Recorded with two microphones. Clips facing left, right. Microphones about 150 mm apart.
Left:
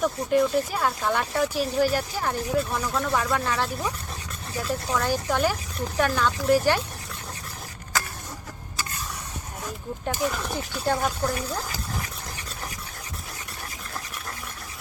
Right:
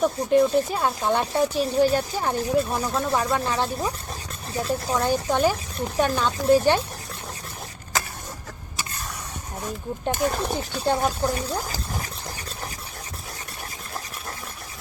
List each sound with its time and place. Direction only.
0.0 s speech: 25° right (ahead or behind)
10.2 s speech: 35° right (ahead or behind)